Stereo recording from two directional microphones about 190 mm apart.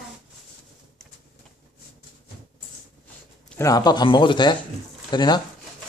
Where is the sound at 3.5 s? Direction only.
20° left (ahead or behind).